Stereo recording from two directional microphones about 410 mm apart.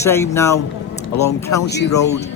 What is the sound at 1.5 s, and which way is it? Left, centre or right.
Speech, left.